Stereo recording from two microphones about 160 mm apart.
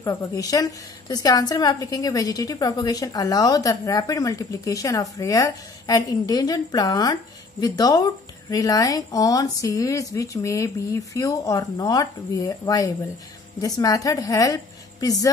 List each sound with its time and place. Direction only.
0.0 s a woman's voice: 20° left (ahead or behind)